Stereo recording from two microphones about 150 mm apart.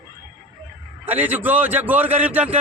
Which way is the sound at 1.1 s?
10° right (ahead or behind).